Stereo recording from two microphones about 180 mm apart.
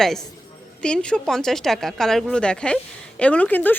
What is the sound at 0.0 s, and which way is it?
Speech, centre (ahead or behind).